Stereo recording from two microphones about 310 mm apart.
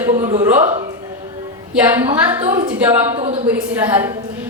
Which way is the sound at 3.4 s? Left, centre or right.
Centre.